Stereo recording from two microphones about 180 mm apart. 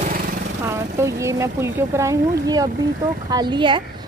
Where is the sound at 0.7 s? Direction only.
15° right (ahead or behind).